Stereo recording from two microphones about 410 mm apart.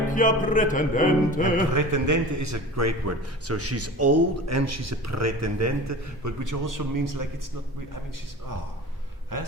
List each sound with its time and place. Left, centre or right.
0.1 s music: centre
1.7 s a man's voice: right